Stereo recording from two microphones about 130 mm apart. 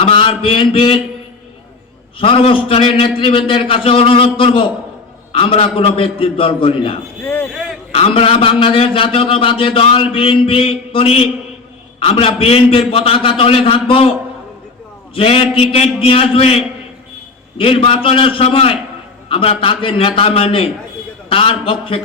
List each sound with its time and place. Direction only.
0.0 s mantra: 45° left (ahead or behind)
2.1 s a man's voice: 45° left (ahead or behind)
7.3 s a sound: 15° left (ahead or behind)
7.9 s a man's voice: 45° left (ahead or behind)
15.1 s a man's voice: 45° left (ahead or behind)